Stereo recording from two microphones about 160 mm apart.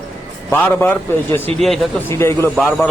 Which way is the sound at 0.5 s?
10° left (ahead or behind).